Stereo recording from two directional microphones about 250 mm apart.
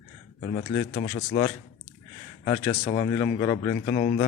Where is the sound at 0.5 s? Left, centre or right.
Left.